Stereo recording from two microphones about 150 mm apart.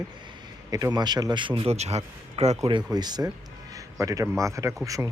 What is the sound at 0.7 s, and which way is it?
A man's voice, 25° right (ahead or behind).